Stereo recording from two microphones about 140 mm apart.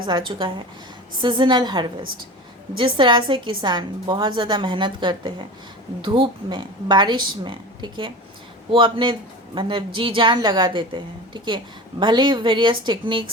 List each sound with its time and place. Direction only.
0.0 s a woman's voice: 35° right (ahead or behind)